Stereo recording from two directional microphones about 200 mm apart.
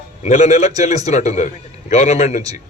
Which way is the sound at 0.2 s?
35° left (ahead or behind).